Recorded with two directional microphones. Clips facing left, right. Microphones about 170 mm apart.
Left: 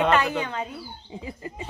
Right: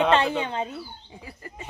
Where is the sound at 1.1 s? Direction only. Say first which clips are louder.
Left 6 dB; 20° left (ahead or behind).